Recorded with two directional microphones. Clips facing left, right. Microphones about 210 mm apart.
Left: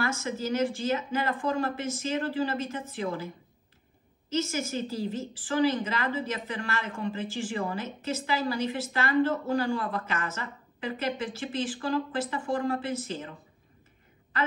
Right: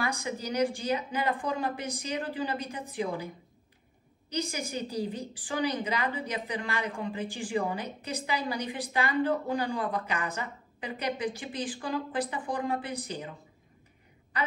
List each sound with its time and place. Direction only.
0.0 s a woman's voice: 15° right (ahead or behind)
4.3 s a woman's voice: 15° right (ahead or behind)